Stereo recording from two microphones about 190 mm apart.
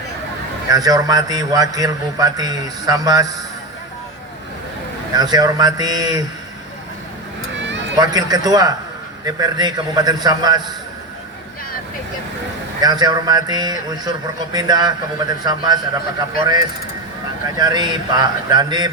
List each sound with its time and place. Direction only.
0.7 s a man's voice: 20° right (ahead or behind)
5.1 s a man's voice: 20° right (ahead or behind)
7.9 s a man's voice: 20° right (ahead or behind)
12.8 s a man's voice: 20° right (ahead or behind)